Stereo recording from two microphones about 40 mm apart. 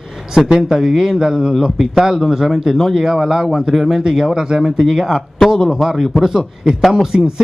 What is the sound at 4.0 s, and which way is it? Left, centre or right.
Speech, centre.